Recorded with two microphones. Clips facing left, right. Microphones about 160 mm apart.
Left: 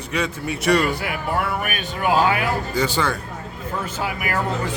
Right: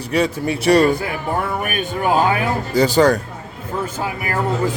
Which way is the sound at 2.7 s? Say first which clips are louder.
Right 8 dB; 40° right (ahead or behind).